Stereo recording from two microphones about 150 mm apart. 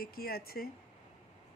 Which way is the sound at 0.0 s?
90° left.